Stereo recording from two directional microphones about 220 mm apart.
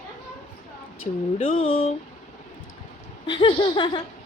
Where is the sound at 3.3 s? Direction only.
20° left (ahead or behind).